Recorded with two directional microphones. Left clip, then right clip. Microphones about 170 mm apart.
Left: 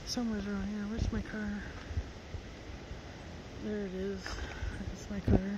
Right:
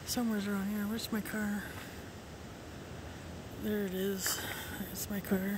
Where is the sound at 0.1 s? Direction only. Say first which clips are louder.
Right 2 dB; 20° right (ahead or behind).